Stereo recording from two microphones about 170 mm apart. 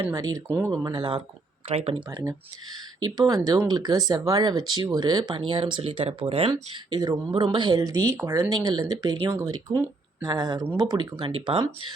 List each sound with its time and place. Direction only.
0.1 s speech: 20° right (ahead or behind)
0.7 s speech: 25° right (ahead or behind)
2.0 s speech: 20° right (ahead or behind)
6.5 s speech: 20° right (ahead or behind)